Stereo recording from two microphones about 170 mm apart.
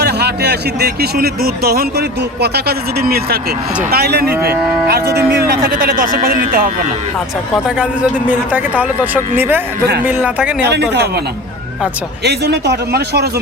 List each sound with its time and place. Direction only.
0.0 s a man's voice: 75° right (ahead or behind)
3.9 s cattle: 65° right (ahead or behind)
8.3 s speech: 10° right (ahead or behind)
10.6 s speech: 80° right
12.2 s a man's voice: 75° right (ahead or behind)